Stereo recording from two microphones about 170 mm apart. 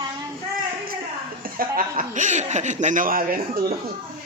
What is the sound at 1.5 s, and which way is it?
Speech, 55° right (ahead or behind).